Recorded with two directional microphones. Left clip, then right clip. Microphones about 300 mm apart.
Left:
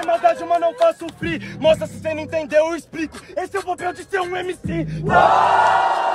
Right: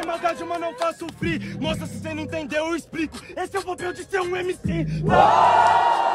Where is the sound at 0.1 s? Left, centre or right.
Centre.